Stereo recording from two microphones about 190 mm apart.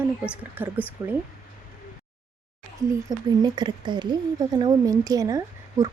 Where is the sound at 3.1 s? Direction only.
20° right (ahead or behind).